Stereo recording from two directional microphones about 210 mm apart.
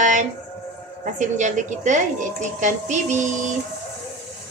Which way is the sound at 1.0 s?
35° right (ahead or behind).